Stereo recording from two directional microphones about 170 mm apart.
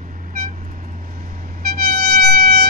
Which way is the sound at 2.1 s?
65° right (ahead or behind).